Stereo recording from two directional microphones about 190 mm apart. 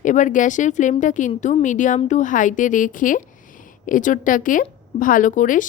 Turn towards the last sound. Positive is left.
turn(degrees=45)  # may be behind; listen again after turning